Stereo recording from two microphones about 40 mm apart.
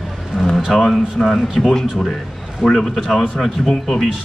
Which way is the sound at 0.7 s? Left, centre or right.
Centre.